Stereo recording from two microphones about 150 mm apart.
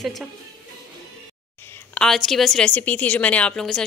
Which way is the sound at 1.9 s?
5° left (ahead or behind).